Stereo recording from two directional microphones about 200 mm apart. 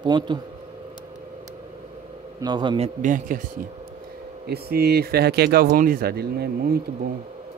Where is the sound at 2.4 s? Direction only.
20° right (ahead or behind); by 3.4 s 40° right (ahead or behind).